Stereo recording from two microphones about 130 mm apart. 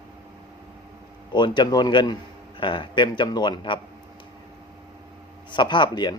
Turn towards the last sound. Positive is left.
turn(degrees=35)  # may be behind; listen again after turning